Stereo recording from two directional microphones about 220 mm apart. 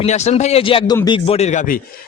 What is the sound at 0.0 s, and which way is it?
A man's voice, 30° left (ahead or behind).